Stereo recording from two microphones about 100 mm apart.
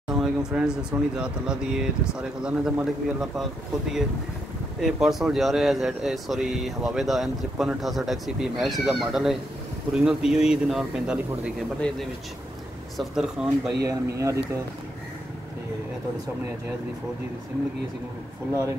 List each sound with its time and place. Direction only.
0.1 s speech: 5° right (ahead or behind)
4.7 s speech: 5° right (ahead or behind)
11.8 s speech: 10° left (ahead or behind)
12.9 s speech: 5° right (ahead or behind)
13.8 s speech: 30° right (ahead or behind)